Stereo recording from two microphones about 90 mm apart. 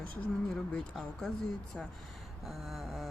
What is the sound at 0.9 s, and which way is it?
Speech, centre (ahead or behind).